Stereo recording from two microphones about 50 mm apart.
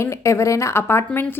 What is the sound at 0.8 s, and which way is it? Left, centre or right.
Speech, left.